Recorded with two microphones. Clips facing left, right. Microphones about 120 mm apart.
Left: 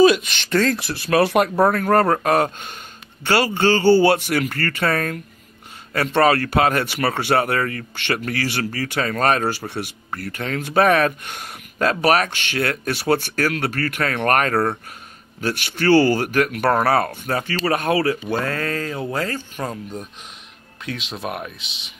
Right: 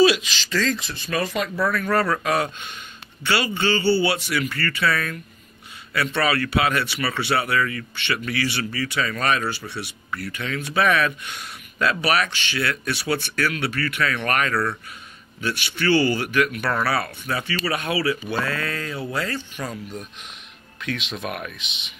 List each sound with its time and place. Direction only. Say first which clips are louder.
0.0 s speech: left 3 dB; 50° left (ahead or behind); by 1.7 s 65° left (ahead or behind)
1.7 s speech: left 5 dB; 50° left (ahead or behind)
21.1 s speech: left 2 dB; 30° left (ahead or behind)